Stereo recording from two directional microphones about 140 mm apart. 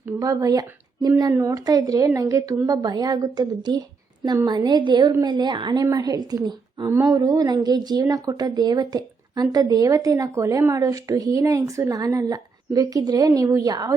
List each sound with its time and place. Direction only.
0.2 s a woman's voice: 25° right (ahead or behind)